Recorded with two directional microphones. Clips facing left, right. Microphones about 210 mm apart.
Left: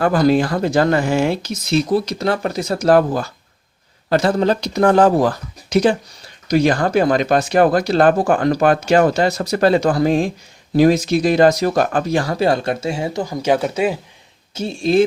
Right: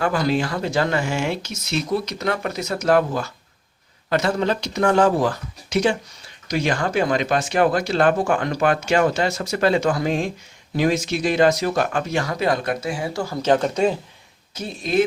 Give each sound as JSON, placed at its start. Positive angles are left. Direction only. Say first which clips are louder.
{"t": 0.0, "sound": "speech", "louder": "left 6 dB", "side_deg": 40}
{"t": 14.5, "sound": "speech", "louder": "left 5 dB", "side_deg": 30}